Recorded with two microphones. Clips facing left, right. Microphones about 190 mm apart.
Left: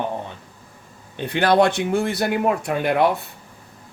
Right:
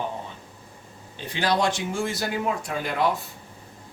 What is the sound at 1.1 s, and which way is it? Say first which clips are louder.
Speech: left 8 dB; 60° left (ahead or behind).